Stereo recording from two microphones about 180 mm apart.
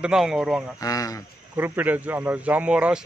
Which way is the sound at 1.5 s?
10° right (ahead or behind).